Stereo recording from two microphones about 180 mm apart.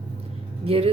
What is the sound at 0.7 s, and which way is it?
Speech, 30° right (ahead or behind).